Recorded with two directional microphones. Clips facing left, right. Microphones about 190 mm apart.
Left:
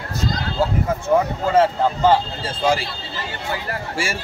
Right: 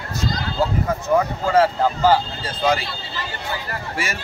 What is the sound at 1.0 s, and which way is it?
Speech, 25° left (ahead or behind).